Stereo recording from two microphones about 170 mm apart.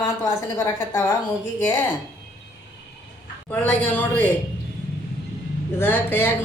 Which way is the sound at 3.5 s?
10° left (ahead or behind).